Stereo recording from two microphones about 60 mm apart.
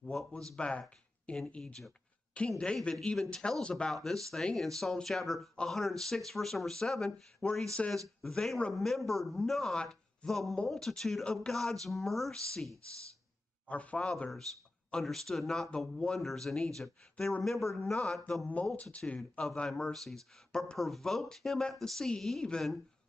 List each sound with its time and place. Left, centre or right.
0.0 s speech: centre
1.6 s speech: centre
8.7 s speech: centre
13.7 s speech: left
14.9 s speech: centre
18.5 s speech: left